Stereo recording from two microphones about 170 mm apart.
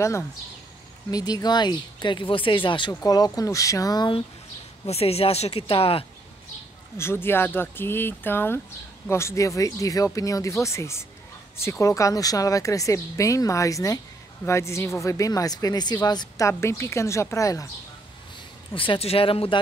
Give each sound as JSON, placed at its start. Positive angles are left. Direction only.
{"t": 1.1, "sound": "speech", "side_deg": 20}
{"t": 4.8, "sound": "speech", "side_deg": 35}
{"t": 7.0, "sound": "speech", "side_deg": 15}
{"t": 18.7, "sound": "speech", "side_deg": 30}